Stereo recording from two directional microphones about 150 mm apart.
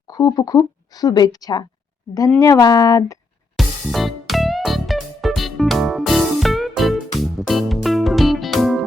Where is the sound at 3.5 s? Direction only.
Centre (ahead or behind).